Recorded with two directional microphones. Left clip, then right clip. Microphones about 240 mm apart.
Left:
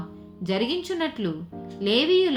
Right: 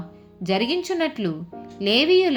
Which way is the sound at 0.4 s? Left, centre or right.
Right.